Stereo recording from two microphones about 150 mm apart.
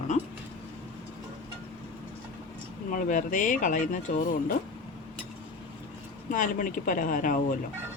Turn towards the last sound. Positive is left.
turn(degrees=65)  # may be behind; listen again after turning